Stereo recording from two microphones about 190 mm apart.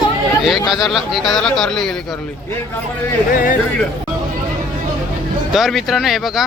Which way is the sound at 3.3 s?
45° left (ahead or behind).